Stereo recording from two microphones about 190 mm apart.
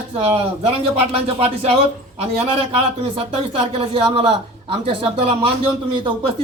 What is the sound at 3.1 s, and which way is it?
A man's voice, 30° right (ahead or behind).